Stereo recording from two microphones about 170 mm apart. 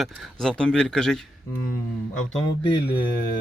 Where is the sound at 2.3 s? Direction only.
30° left (ahead or behind).